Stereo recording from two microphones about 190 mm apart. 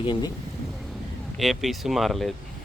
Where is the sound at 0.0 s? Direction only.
25° left (ahead or behind).